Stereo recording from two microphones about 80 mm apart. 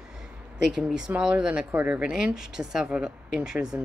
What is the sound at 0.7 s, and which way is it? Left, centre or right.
Speech, centre.